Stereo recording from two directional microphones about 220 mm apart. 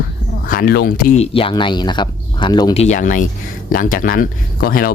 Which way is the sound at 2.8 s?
35° left (ahead or behind).